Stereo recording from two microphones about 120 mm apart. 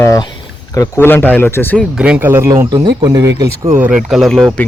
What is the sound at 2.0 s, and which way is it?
Speech, 10° right (ahead or behind).